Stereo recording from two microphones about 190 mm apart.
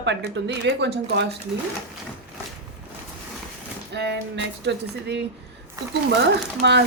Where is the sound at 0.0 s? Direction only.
65° right (ahead or behind).